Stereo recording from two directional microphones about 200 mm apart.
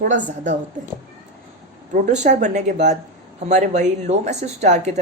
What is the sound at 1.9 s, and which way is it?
A woman's voice, 35° right (ahead or behind).